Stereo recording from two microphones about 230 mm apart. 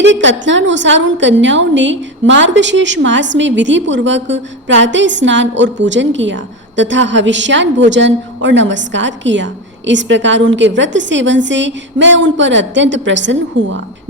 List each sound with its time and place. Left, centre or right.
0.0 s a woman's voice: right